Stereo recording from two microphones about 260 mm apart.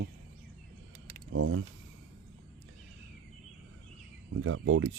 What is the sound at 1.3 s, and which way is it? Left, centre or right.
Speech, right.